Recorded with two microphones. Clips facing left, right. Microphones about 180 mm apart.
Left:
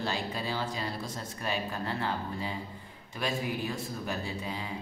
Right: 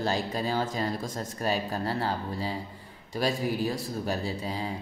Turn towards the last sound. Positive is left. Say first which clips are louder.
# right 4 dB
turn(degrees=-35)  # may be behind; listen again after turning